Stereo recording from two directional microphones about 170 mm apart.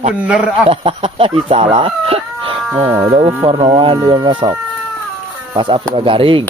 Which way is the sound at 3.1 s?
30° right (ahead or behind).